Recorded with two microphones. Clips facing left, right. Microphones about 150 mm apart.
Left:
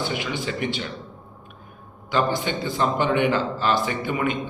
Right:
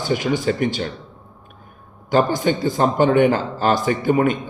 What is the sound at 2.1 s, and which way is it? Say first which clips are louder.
A man's voice: right 6 dB; 45° right (ahead or behind).